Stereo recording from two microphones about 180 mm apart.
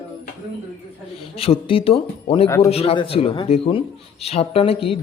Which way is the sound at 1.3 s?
30° left (ahead or behind).